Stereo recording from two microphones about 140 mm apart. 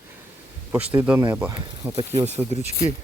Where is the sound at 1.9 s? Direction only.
45° right (ahead or behind).